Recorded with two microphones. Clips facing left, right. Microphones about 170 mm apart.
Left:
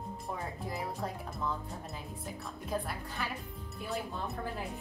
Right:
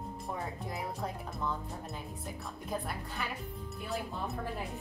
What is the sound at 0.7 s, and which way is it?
Speech, centre (ahead or behind).